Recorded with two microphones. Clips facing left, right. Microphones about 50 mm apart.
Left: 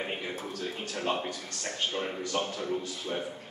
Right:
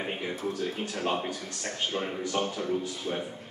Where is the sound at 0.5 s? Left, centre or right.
Centre.